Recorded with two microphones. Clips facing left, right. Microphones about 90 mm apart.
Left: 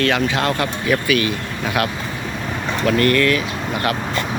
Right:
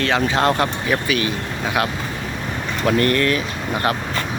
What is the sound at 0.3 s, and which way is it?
Speech, 30° right (ahead or behind).